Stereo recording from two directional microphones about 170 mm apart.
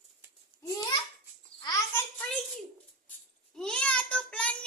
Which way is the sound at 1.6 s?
20° left (ahead or behind).